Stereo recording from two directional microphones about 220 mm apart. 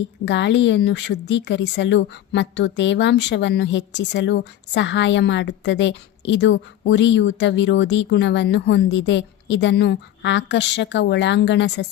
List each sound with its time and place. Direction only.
0.3 s speech: 55° left (ahead or behind)